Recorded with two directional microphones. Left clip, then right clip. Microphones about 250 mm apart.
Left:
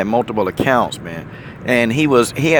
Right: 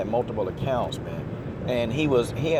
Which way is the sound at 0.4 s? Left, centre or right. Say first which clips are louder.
Left 11 dB; left.